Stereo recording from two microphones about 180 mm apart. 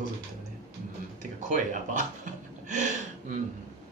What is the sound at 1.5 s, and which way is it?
Speech, 45° right (ahead or behind).